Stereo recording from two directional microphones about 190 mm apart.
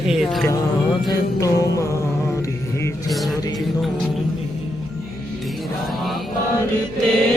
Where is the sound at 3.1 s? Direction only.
Centre (ahead or behind).